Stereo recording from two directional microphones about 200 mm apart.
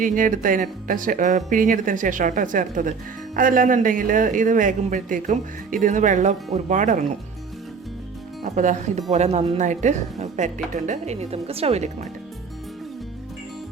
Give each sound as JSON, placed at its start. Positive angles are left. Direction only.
{"t": 0.0, "sound": "a man's voice", "side_deg": -40}
{"t": 8.4, "sound": "a man's voice", "side_deg": -35}